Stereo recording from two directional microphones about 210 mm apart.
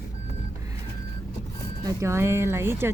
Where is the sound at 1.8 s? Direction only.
15° right (ahead or behind).